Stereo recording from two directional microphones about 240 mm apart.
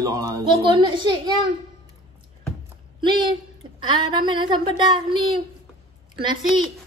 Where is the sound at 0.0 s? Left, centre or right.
Centre.